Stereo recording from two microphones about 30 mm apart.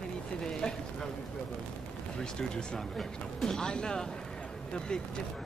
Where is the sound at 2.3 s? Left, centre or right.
Left.